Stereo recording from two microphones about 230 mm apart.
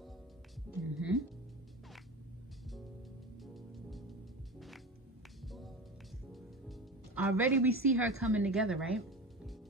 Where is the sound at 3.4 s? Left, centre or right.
Centre.